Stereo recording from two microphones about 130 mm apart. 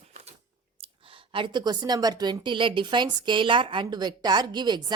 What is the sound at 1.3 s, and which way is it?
Speech, 40° right (ahead or behind).